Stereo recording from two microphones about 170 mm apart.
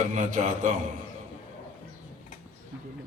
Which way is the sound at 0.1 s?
45° right (ahead or behind).